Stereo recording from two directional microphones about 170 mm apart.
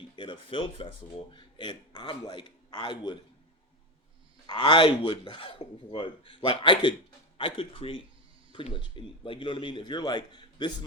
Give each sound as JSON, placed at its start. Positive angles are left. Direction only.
{"t": 0.2, "sound": "a sound", "side_deg": 30}
{"t": 1.3, "sound": "speech", "side_deg": 30}
{"t": 4.4, "sound": "speech", "side_deg": 25}